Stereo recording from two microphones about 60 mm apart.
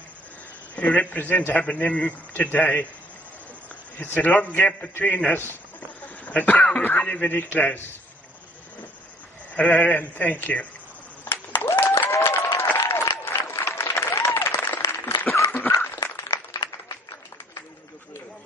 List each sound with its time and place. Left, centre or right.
0.7 s a man's voice: left
4.0 s a man's voice: left
9.5 s a man's voice: left
11.2 s applause: left